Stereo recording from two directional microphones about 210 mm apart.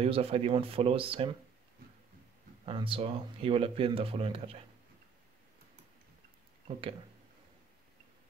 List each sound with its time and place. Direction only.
0.0 s speech: 30° right (ahead or behind)
2.6 s speech: 25° right (ahead or behind)